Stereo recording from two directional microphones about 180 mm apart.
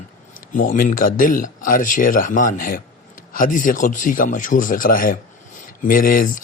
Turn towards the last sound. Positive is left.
turn(degrees=50)  # may be behind; listen again after turning